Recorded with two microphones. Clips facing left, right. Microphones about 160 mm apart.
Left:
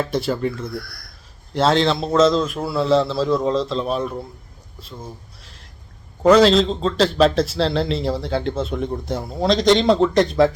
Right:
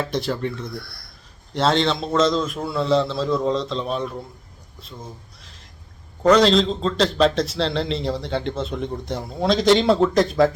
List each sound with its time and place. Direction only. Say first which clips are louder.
0.0 s a man's voice: left 3 dB; centre (ahead or behind)
0.9 s speech: left 2 dB; 25° right (ahead or behind)
1.5 s a man's voice: left 2 dB; centre (ahead or behind)